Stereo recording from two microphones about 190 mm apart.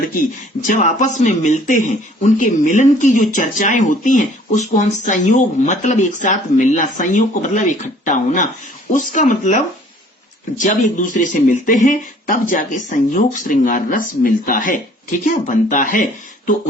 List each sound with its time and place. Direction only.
0.7 s speech: 40° left (ahead or behind)
10.6 s speech: 40° left (ahead or behind)